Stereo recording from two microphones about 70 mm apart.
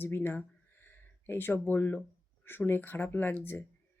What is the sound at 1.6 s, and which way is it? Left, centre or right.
Speech, left.